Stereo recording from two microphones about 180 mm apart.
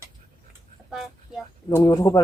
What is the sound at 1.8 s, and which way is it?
Speech, 20° left (ahead or behind).